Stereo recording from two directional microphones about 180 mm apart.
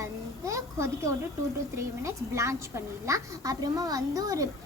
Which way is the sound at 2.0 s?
15° right (ahead or behind).